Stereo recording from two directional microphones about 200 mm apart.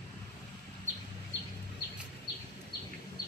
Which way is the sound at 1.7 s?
55° left (ahead or behind).